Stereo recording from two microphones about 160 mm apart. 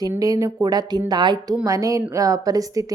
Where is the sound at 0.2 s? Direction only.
20° right (ahead or behind).